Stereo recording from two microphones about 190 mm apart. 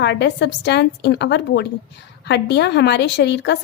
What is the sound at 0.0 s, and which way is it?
A woman's voice, 60° left (ahead or behind).